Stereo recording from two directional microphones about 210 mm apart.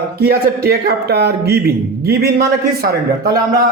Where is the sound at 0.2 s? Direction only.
45° right (ahead or behind).